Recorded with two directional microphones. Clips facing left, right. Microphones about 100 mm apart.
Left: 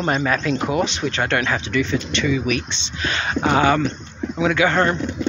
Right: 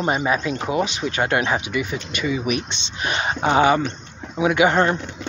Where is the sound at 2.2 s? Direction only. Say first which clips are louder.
Right 1 dB; 20° right (ahead or behind).